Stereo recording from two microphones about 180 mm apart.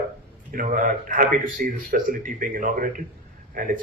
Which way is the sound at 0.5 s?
50° right (ahead or behind).